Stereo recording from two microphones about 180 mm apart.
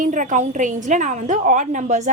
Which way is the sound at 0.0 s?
45° right (ahead or behind).